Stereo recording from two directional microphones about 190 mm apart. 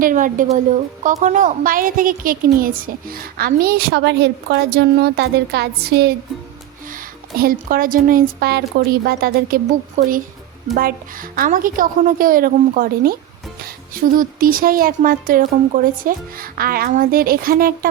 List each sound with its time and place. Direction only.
0.0 s a woman's voice: 45° right (ahead or behind)
10.8 s a woman's voice: 50° right (ahead or behind)